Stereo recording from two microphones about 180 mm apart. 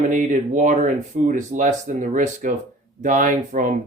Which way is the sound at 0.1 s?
45° right (ahead or behind).